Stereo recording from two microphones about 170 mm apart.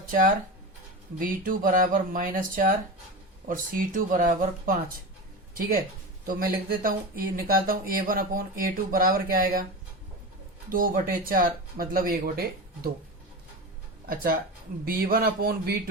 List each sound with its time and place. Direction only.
1.2 s speech: 55° right (ahead or behind)
10.7 s speech: 55° right (ahead or behind)
14.8 s speech: 60° right (ahead or behind)